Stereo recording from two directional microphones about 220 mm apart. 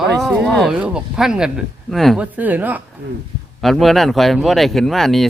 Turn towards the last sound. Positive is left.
turn(degrees=0)  # may be behind; listen again after turning